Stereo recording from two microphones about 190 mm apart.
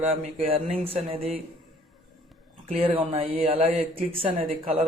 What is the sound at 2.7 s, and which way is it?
Speech, 30° right (ahead or behind).